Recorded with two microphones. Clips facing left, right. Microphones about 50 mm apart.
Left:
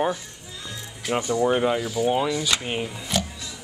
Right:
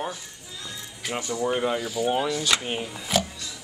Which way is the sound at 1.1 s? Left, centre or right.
Left.